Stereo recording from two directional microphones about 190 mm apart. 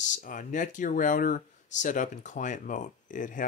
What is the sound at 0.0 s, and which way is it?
Speech, 40° left (ahead or behind).